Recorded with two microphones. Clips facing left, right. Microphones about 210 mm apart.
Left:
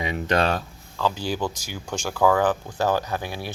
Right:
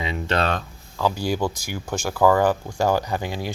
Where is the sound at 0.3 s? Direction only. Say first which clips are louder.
Left 1 dB; 10° left (ahead or behind).